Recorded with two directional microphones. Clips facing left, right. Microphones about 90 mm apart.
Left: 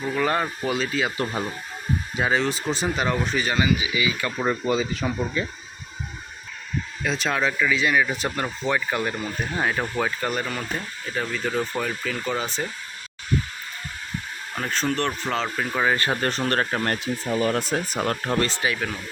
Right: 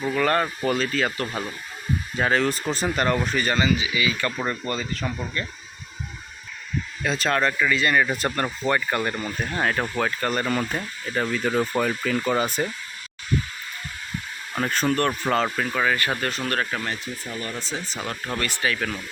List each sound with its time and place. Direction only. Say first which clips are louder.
0.1 s speech: right 1 dB; 10° left (ahead or behind)
1.1 s speech: left 2 dB; 20° left (ahead or behind)
2.1 s speech: right 1 dB; 5° left (ahead or behind)
3.6 s speech: even; 15° left (ahead or behind)
4.3 s speech: left 4 dB; 5° left (ahead or behind)
7.0 s speech: right 2 dB; centre (ahead or behind)
14.5 s speech: right 3 dB; 5° right (ahead or behind)
15.7 s speech: left 5 dB; 20° left (ahead or behind)
16.8 s speech: left 5 dB; 65° left (ahead or behind); by 17.6 s 80° left
17.6 s speech: left 6 dB; 55° left (ahead or behind)
18.3 s speech: left 3 dB; 25° left (ahead or behind)